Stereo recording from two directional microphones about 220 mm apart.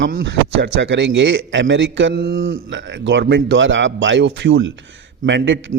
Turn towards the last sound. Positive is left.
turn(degrees=-55)  # may be behind; listen again after turning